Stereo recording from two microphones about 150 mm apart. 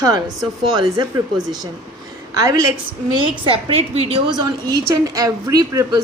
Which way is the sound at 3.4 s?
40° right (ahead or behind).